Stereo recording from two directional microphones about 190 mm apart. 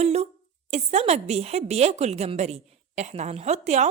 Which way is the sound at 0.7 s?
35° right (ahead or behind).